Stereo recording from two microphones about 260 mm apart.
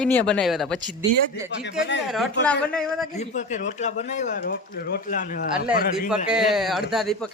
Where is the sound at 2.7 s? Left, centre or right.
Centre.